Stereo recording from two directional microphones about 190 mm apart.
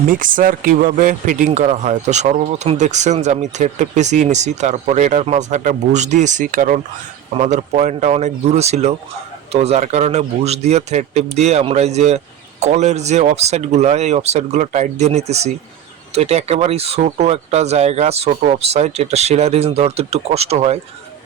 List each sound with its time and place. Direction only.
0.1 s a man's voice: 45° right (ahead or behind)